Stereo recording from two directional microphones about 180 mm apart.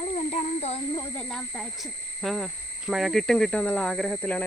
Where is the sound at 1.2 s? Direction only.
5° left (ahead or behind).